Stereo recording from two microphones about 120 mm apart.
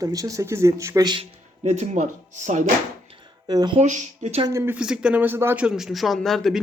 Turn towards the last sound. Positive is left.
turn(degrees=0)  # may be behind; listen again after turning